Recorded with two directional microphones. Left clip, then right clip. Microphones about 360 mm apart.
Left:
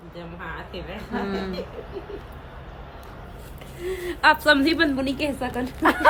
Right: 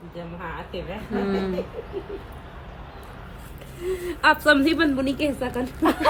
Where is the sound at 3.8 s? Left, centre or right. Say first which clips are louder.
Left 1 dB; centre.